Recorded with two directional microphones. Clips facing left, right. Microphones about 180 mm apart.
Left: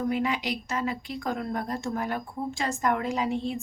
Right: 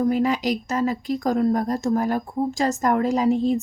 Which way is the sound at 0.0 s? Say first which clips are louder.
Right 7 dB; 40° right (ahead or behind).